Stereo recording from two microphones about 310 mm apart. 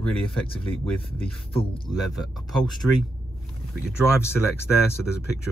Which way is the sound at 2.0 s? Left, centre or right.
Centre.